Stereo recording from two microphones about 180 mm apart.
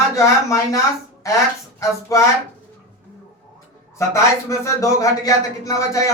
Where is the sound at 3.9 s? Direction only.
15° left (ahead or behind).